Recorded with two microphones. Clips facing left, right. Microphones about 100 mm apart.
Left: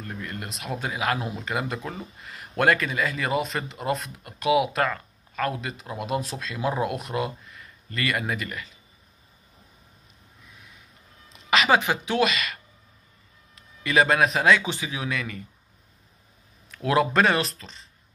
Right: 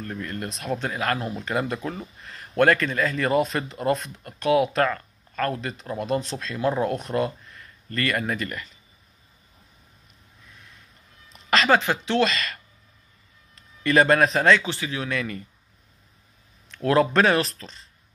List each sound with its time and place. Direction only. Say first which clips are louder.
0.0 s speech: right 3 dB; 10° left (ahead or behind)
1.3 s speech: right 3 dB; centre (ahead or behind)
11.3 s a sound: right 1 dB; 5° left (ahead or behind)
11.7 s speech: right 2 dB; 15° left (ahead or behind)
13.8 s speech: right 2 dB; centre (ahead or behind)
14.6 s speech: right 1 dB; 15° left (ahead or behind)
15.0 s speech: right 2 dB; centre (ahead or behind)
16.7 s speech: right 2 dB; 5° left (ahead or behind)